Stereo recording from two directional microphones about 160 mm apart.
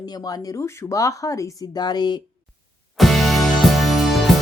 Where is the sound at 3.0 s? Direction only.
Centre (ahead or behind).